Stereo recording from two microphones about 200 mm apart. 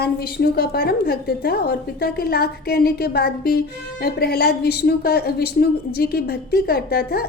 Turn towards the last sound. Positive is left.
turn(degrees=50)  # may be behind; listen again after turning